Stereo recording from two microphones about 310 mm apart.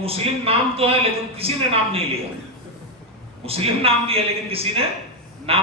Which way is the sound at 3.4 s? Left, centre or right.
Centre.